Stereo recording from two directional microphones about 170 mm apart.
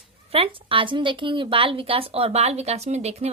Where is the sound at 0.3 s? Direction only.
30° right (ahead or behind).